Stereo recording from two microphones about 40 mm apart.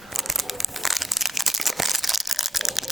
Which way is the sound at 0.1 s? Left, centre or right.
Centre.